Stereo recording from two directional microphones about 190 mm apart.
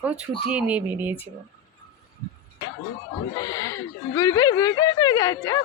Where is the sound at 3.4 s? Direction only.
15° left (ahead or behind).